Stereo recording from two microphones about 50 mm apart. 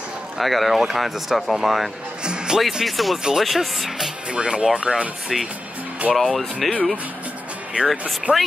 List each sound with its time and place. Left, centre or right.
0.4 s speech: centre
2.2 s speech: centre
2.6 s speech: centre
4.3 s speech: right
5.3 s speech: centre
7.8 s speech: right